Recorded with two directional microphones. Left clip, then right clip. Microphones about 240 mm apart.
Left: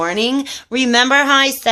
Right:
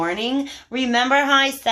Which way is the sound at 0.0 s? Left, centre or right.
Left.